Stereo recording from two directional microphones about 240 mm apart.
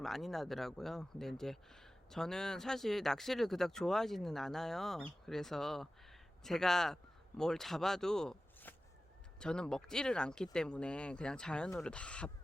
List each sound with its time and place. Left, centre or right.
0.0 s speech: centre